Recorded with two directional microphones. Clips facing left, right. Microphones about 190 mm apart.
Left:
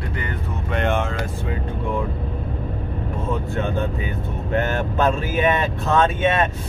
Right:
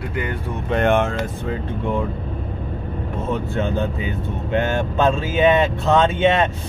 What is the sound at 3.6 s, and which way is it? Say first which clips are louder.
Speech: right 2 dB; 20° right (ahead or behind).